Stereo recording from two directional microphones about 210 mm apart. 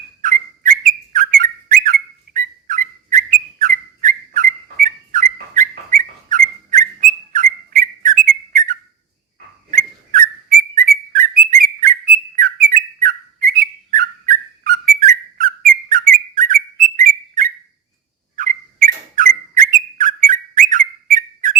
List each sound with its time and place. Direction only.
0.2 s bird: 40° right (ahead or behind)
9.7 s a sound: 40° right (ahead or behind)
10.8 s bird: 40° right (ahead or behind)